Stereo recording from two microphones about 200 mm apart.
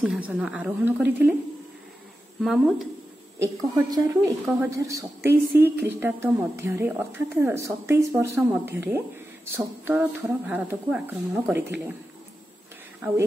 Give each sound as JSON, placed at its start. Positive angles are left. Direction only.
{"t": 0.0, "sound": "a woman's voice", "side_deg": -5}
{"t": 2.4, "sound": "a woman's voice", "side_deg": 0}
{"t": 3.3, "sound": "a woman's voice", "side_deg": -15}